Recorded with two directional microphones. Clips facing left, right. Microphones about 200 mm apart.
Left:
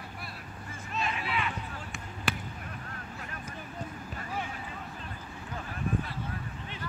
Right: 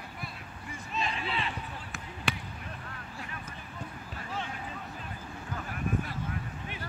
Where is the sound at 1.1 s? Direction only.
30° right (ahead or behind).